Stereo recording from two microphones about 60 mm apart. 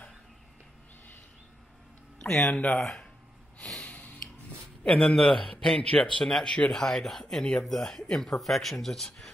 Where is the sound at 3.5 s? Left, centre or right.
Centre.